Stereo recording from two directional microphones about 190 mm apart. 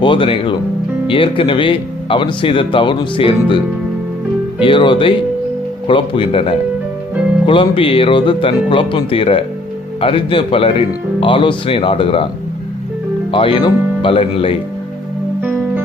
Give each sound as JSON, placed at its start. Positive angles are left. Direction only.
{"t": 0.0, "sound": "speech", "side_deg": 25}
{"t": 4.6, "sound": "speech", "side_deg": 25}
{"t": 13.3, "sound": "speech", "side_deg": 25}